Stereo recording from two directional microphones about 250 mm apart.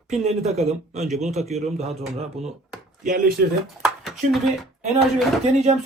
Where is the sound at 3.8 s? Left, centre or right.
Centre.